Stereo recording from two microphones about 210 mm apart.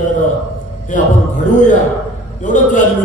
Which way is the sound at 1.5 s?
35° left (ahead or behind).